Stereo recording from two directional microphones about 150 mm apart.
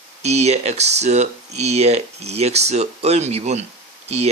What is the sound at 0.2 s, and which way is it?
Speech, 45° right (ahead or behind).